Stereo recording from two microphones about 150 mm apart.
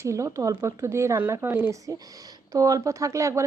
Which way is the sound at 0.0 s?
20° right (ahead or behind).